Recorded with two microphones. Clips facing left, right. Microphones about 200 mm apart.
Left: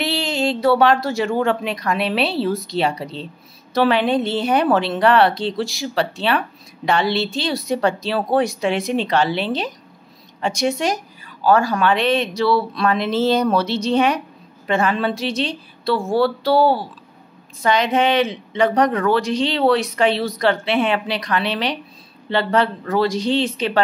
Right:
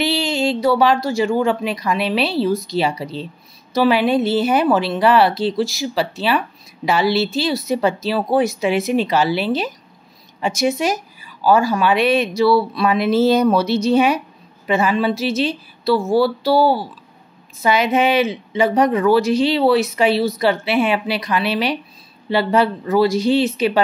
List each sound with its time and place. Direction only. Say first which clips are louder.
0.0 s a woman's voice: right 2 dB; centre (ahead or behind)